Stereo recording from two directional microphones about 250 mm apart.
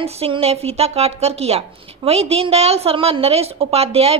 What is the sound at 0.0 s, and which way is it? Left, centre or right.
A woman's voice, right.